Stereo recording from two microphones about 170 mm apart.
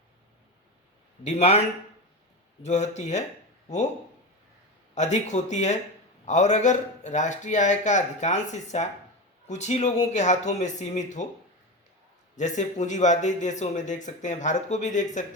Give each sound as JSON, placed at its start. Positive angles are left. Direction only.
{"t": 1.2, "sound": "a man's voice", "side_deg": 40}
{"t": 2.6, "sound": "speech", "side_deg": 45}
{"t": 4.9, "sound": "speech", "side_deg": 45}
{"t": 12.4, "sound": "speech", "side_deg": 45}